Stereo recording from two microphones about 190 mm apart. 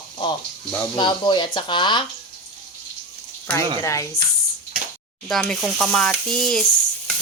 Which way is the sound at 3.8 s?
15° left (ahead or behind).